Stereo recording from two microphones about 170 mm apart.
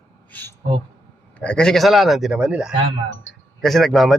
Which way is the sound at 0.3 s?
10° left (ahead or behind).